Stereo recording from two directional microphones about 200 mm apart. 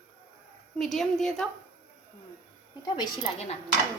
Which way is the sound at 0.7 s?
Centre (ahead or behind).